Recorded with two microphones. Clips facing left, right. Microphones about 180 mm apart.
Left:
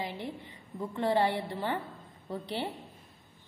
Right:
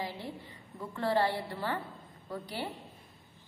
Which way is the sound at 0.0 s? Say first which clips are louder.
Left 2 dB; 20° left (ahead or behind).